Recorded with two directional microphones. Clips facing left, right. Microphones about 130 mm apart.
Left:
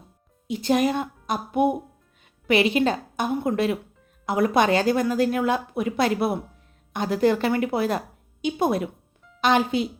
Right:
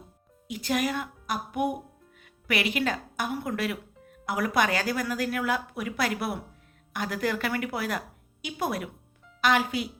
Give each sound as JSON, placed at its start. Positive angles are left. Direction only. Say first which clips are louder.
{"t": 0.4, "sound": "a woman's voice", "louder": "left 7 dB", "side_deg": 25}